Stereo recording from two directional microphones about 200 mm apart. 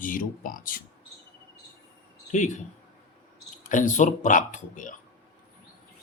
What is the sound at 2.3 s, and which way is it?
Speech, 40° left (ahead or behind).